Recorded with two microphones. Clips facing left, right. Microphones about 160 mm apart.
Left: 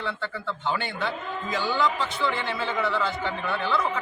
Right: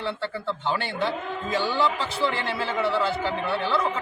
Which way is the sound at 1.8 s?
30° right (ahead or behind).